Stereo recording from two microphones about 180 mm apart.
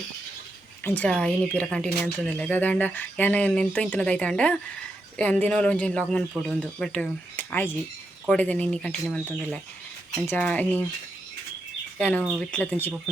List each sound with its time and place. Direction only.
0.9 s speech: 5° left (ahead or behind)
11.9 s speech: 5° left (ahead or behind)